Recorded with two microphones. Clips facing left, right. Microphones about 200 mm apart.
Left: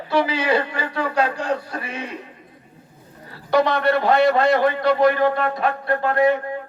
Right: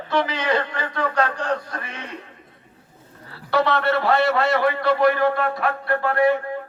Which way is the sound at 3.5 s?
15° left (ahead or behind).